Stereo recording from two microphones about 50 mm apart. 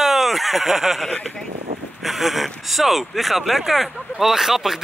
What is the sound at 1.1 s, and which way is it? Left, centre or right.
Speech, centre.